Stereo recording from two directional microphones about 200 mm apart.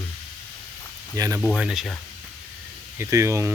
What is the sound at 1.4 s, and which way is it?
Speech, centre (ahead or behind).